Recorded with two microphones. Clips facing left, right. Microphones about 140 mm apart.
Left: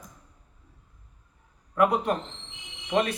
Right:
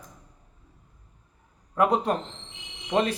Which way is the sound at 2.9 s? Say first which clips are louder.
Right 1 dB; 30° right (ahead or behind).